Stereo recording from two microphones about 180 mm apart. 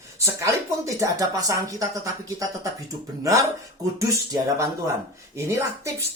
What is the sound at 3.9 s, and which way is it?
Speech, 15° right (ahead or behind).